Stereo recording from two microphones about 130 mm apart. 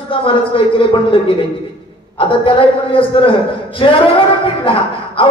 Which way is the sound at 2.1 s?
40° left (ahead or behind).